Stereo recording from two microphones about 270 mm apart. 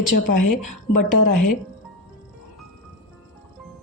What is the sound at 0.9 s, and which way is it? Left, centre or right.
Speech, left.